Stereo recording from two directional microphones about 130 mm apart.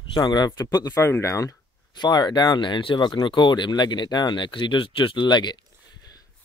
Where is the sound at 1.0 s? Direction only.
20° left (ahead or behind).